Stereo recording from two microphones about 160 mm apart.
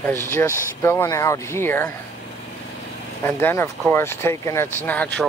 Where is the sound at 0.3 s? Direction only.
15° left (ahead or behind).